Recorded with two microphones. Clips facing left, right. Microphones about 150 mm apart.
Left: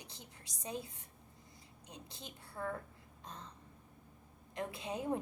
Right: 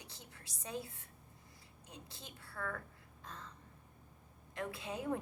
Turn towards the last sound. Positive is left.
turn(degrees=20)  # may be behind; listen again after turning